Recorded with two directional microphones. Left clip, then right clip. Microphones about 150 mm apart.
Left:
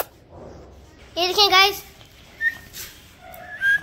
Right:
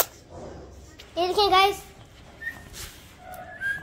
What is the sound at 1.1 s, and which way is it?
Speech, 5° right (ahead or behind).